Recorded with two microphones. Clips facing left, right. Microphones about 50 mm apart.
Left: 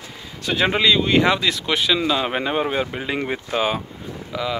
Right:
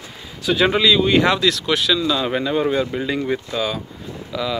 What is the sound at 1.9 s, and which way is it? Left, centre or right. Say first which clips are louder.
Speech: right 1 dB; left.